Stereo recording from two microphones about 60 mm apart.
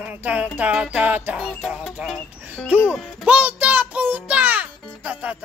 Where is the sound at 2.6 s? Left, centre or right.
Centre.